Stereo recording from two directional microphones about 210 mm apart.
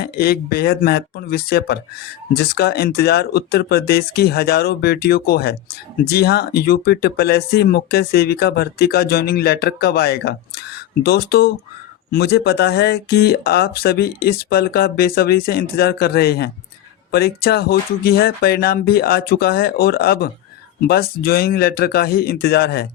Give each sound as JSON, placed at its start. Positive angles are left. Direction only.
{"t": 0.0, "sound": "speech", "side_deg": 45}